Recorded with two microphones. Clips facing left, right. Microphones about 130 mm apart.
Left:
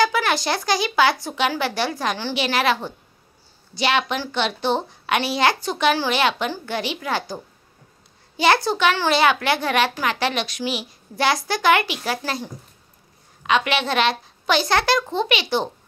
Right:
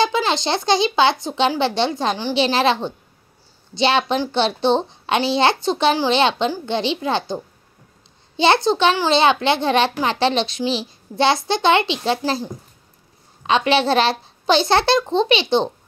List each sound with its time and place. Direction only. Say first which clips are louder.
0.0 s a child's voice: right 1 dB; 25° right (ahead or behind)
8.4 s a child's voice: right 3 dB; 25° right (ahead or behind)
13.4 s a child's voice: right 4 dB; 30° right (ahead or behind)